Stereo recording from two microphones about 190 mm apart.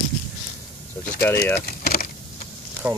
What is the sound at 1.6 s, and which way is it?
Speech, 55° left (ahead or behind).